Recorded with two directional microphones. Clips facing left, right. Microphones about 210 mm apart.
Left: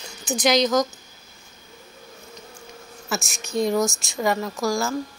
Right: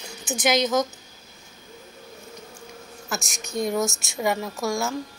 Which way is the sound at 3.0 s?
5° left (ahead or behind).